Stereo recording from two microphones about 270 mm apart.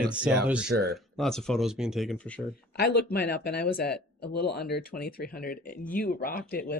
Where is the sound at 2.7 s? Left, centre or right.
Left.